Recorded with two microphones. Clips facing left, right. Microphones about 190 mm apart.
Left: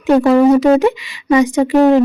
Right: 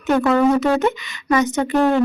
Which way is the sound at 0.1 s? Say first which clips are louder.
Left 6 dB; 30° left (ahead or behind).